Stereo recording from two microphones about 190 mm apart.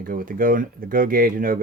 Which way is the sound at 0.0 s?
50° right (ahead or behind).